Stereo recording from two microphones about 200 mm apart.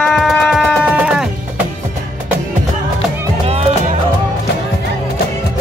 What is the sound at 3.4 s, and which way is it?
Music, 30° right (ahead or behind).